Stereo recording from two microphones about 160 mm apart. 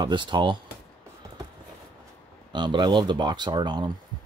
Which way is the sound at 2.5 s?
30° right (ahead or behind).